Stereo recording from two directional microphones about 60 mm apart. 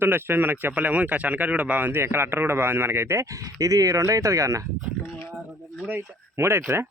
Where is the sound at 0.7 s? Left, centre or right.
Right.